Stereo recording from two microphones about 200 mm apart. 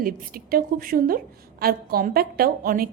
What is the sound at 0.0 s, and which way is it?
A woman's voice, 45° right (ahead or behind).